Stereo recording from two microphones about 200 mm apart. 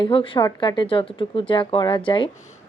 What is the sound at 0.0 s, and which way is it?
Speech, 25° left (ahead or behind).